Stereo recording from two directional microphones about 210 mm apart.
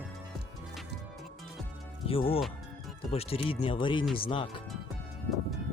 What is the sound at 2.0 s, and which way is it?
Speech, 25° left (ahead or behind).